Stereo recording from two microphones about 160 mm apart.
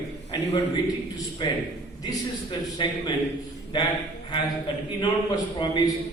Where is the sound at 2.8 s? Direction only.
30° left (ahead or behind).